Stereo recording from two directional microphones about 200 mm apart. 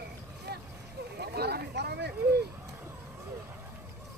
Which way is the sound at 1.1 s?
55° right (ahead or behind).